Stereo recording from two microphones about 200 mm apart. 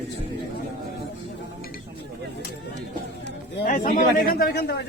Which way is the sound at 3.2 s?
50° left (ahead or behind).